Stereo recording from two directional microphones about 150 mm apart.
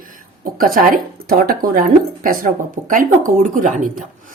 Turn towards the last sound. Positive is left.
turn(degrees=-60)  # may be behind; listen again after turning